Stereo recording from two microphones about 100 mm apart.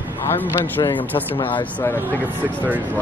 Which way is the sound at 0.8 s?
50° left (ahead or behind).